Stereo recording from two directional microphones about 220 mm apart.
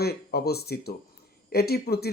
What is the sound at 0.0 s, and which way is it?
Speech, 45° left (ahead or behind).